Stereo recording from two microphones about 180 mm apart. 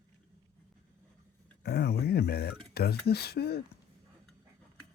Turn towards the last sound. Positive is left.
turn(degrees=60)  # may be behind; listen again after turning